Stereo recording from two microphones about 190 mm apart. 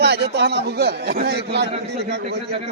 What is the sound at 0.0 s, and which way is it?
A man's voice, 60° right (ahead or behind).